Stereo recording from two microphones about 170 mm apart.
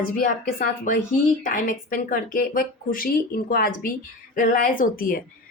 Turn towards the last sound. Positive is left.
turn(degrees=55)  # may be behind; listen again after turning